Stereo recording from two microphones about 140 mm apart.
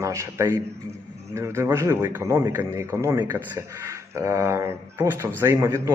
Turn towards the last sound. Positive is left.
turn(degrees=-20)  # may be behind; listen again after turning